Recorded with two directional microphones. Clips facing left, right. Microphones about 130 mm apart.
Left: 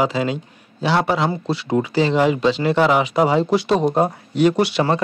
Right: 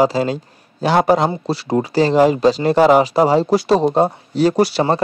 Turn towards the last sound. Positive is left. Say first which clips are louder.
# right 2 dB
turn(degrees=-35)  # may be behind; listen again after turning